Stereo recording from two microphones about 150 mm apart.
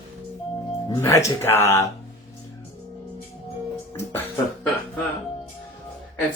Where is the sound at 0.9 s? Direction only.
20° left (ahead or behind).